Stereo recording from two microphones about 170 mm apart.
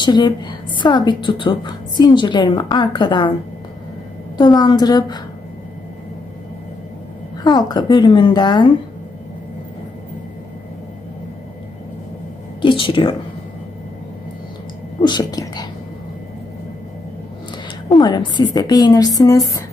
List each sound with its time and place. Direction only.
0.0 s a woman's voice: 25° left (ahead or behind)
4.4 s a woman's voice: 25° left (ahead or behind)
7.4 s a woman's voice: 25° left (ahead or behind)
12.6 s speech: 30° left (ahead or behind)
15.0 s whispering: 25° left (ahead or behind)
17.8 s a woman's voice: 25° left (ahead or behind)